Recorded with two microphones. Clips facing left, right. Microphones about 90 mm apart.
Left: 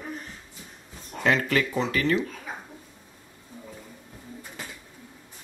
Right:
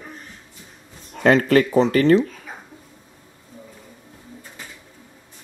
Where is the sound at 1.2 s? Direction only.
45° right (ahead or behind).